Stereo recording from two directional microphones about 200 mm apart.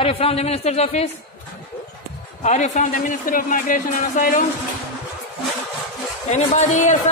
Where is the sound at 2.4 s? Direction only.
35° left (ahead or behind).